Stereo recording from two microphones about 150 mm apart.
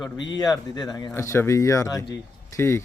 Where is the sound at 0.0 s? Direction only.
25° left (ahead or behind).